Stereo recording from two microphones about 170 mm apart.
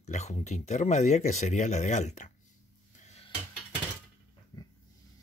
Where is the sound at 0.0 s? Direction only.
45° left (ahead or behind).